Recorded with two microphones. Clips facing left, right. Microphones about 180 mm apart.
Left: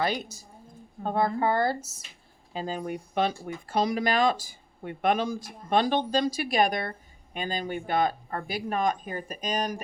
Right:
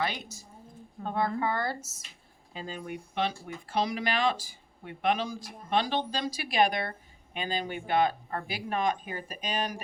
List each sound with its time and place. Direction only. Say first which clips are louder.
0.0 s speech: left 4 dB; 40° left (ahead or behind)